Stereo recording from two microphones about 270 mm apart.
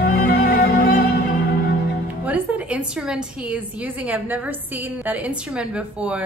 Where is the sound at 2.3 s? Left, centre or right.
Centre.